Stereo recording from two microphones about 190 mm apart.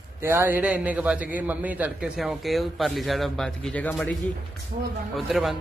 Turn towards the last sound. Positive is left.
turn(degrees=0)  # may be behind; listen again after turning